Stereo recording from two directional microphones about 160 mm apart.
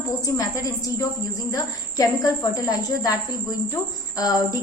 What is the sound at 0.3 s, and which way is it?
A woman's voice, 20° left (ahead or behind).